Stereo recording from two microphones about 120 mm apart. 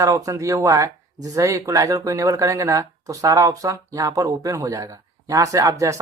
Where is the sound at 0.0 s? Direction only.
25° right (ahead or behind).